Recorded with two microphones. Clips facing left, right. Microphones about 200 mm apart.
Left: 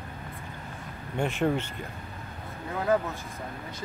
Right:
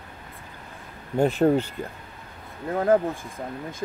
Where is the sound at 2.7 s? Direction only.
50° right (ahead or behind).